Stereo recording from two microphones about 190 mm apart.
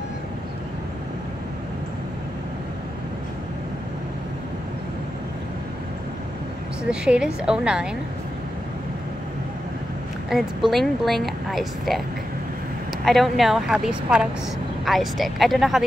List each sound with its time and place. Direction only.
6.8 s a woman's voice: 5° right (ahead or behind)
10.7 s a woman's voice: centre (ahead or behind)
13.0 s a woman's voice: centre (ahead or behind)